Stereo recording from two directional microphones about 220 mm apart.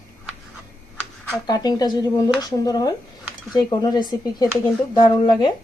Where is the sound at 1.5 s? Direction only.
15° left (ahead or behind).